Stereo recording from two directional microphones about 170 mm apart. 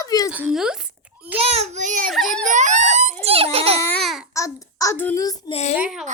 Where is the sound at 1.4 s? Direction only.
35° right (ahead or behind).